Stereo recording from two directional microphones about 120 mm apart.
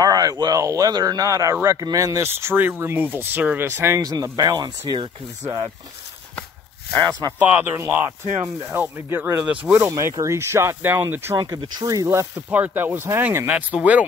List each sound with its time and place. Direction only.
0.0 s speech: 30° right (ahead or behind)
7.0 s speech: 30° right (ahead or behind)
7.3 s speech: 15° right (ahead or behind)
11.3 s speech: 30° right (ahead or behind); by 14.0 s 10° right (ahead or behind)